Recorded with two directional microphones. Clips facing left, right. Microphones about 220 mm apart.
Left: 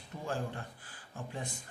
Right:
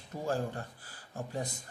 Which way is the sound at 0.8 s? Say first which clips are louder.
Right 4 dB; 40° right (ahead or behind).